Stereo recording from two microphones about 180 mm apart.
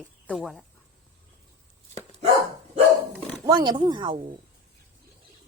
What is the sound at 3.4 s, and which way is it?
Speech, 25° right (ahead or behind).